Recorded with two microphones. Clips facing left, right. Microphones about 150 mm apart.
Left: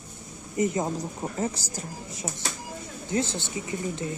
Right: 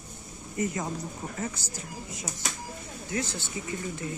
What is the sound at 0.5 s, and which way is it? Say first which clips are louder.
Speech: left 5 dB; 20° left (ahead or behind).